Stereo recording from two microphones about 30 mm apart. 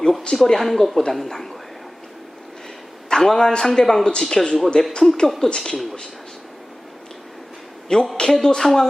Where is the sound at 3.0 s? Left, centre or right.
Centre.